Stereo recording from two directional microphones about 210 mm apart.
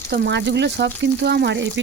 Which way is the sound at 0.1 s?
55° right (ahead or behind).